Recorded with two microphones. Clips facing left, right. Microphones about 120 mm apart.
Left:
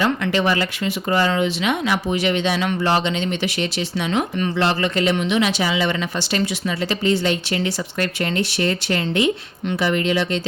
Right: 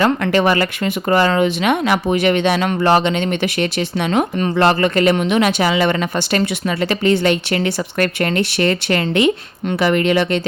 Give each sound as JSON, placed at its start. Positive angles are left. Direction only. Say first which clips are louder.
{"t": 0.0, "sound": "speech", "louder": "right 4 dB", "side_deg": -50}